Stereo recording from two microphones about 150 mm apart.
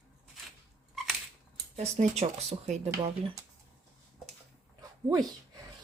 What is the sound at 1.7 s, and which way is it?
Speech, 45° right (ahead or behind).